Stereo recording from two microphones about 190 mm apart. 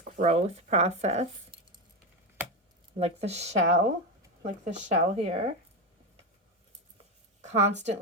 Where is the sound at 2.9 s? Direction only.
35° right (ahead or behind).